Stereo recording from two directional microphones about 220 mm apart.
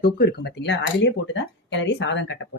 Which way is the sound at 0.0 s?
45° left (ahead or behind).